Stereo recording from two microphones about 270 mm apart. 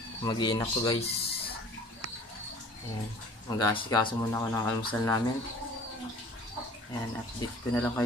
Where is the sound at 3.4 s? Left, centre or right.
Centre.